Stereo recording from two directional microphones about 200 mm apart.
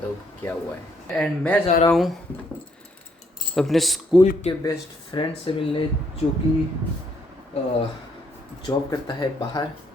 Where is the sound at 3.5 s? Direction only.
Centre (ahead or behind).